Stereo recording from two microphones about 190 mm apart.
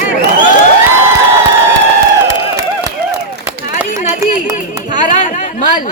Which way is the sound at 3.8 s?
40° left (ahead or behind).